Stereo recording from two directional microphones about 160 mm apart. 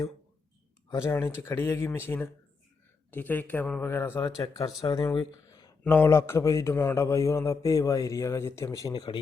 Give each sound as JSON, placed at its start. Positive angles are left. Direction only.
{"t": 0.9, "sound": "a man's voice", "side_deg": 15}
{"t": 5.8, "sound": "a man's voice", "side_deg": 10}